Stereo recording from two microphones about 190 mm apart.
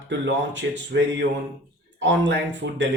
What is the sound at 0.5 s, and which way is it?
A man's voice, 65° right (ahead or behind).